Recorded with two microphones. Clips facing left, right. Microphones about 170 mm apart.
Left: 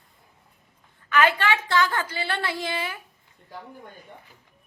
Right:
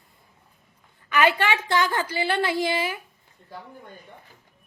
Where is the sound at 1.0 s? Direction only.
15° right (ahead or behind).